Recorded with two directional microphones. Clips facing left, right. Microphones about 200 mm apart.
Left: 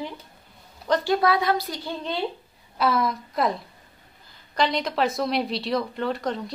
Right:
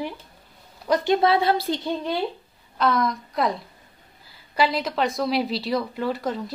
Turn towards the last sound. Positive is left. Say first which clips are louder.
# right 1 dB
turn(degrees=-5)  # may be behind; listen again after turning